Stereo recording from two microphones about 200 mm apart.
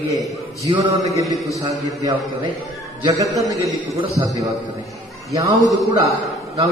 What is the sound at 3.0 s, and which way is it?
A man's voice, 15° right (ahead or behind).